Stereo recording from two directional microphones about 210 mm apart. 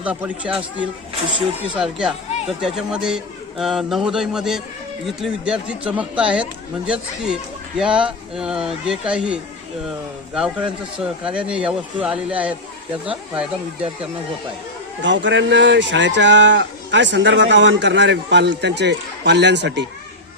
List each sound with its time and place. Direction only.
0.0 s speech: 5° right (ahead or behind)
15.0 s speech: 60° right (ahead or behind)